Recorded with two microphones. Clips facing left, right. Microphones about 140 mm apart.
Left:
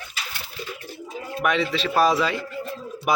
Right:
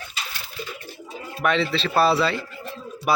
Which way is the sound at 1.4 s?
10° left (ahead or behind).